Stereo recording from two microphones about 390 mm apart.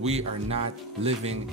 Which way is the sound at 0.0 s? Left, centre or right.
Centre.